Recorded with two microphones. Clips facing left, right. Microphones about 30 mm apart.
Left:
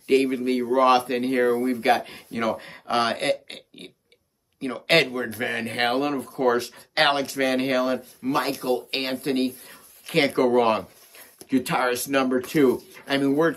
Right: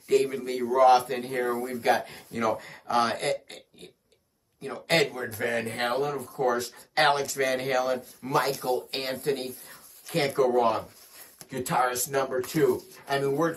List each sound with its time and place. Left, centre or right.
0.1 s speech: left
2.0 s speech: left
4.6 s speech: left
5.2 s speech: left
5.7 s speech: left
7.2 s speech: left
8.3 s speech: left
8.5 s speech: left